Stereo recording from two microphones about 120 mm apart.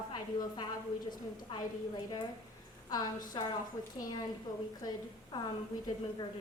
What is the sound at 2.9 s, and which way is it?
Speech, 35° left (ahead or behind).